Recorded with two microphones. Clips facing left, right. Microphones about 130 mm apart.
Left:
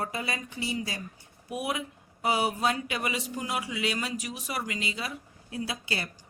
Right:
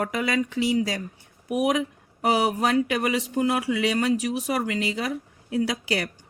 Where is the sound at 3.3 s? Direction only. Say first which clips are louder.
Right 9 dB; 70° right (ahead or behind).